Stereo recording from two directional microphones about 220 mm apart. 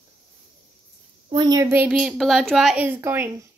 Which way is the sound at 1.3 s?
20° right (ahead or behind).